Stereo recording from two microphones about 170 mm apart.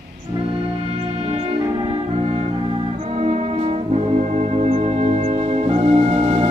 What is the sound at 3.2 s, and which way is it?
Brass instrument, 40° right (ahead or behind).